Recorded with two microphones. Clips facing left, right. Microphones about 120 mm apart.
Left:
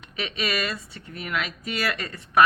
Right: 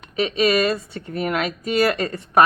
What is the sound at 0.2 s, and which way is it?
Speech, 35° right (ahead or behind).